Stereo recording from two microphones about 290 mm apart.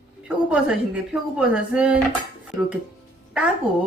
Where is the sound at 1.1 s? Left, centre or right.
Centre.